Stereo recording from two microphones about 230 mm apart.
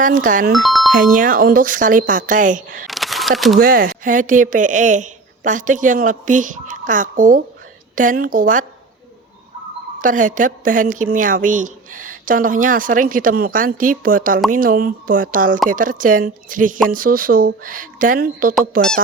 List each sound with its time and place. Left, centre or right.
0.0 s a woman's voice: right
0.5 s music: centre
0.9 s a woman's voice: right
2.8 s a sound: centre
3.6 s a woman's voice: right
10.0 s a woman's voice: right